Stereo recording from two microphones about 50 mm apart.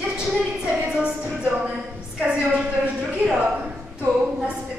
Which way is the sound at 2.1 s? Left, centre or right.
Centre.